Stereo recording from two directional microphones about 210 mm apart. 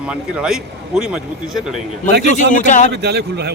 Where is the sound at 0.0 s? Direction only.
5° right (ahead or behind).